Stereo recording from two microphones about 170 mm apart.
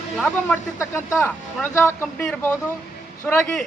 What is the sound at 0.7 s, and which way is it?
Speech, 15° left (ahead or behind).